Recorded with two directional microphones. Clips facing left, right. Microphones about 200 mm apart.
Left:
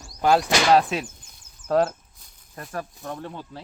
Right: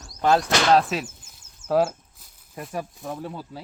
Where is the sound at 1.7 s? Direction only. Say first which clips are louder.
Even; 5° right (ahead or behind).